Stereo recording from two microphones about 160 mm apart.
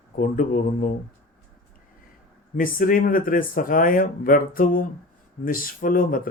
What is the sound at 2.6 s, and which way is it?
Speech, 60° left (ahead or behind).